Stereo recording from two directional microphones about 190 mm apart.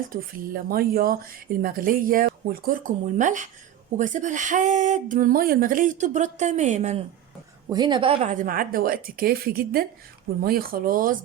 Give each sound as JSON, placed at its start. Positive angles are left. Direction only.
{"t": 0.1, "sound": "speech", "side_deg": -50}
{"t": 7.7, "sound": "speech", "side_deg": -25}